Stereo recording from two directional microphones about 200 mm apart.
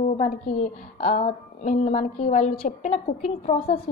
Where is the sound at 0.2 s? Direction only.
35° left (ahead or behind).